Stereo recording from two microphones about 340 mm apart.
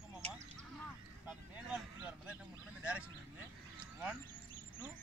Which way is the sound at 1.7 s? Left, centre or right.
Centre.